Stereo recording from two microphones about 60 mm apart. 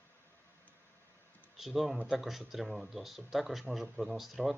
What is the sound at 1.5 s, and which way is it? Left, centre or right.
Speech, centre.